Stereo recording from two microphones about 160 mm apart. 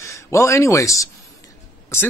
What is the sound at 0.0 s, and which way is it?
Speech, 20° left (ahead or behind).